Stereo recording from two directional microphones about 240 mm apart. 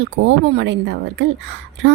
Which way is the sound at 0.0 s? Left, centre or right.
Right.